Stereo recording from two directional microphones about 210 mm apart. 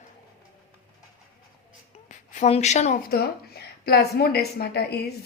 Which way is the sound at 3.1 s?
50° left (ahead or behind).